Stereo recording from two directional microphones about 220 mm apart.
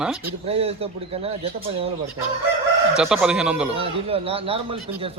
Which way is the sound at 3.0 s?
5° right (ahead or behind).